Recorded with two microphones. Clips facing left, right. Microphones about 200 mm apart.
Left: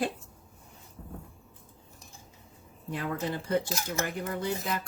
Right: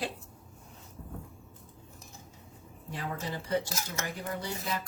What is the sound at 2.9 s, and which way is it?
Speech, 55° left (ahead or behind).